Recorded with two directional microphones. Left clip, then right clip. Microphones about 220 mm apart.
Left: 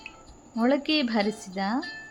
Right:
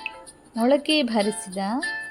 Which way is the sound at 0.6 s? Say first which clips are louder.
Right 4 dB; 10° right (ahead or behind).